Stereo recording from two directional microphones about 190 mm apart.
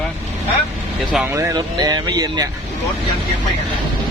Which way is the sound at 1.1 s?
10° right (ahead or behind).